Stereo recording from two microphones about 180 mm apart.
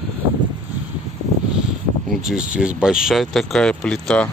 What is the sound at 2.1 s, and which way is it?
Speech, 5° right (ahead or behind).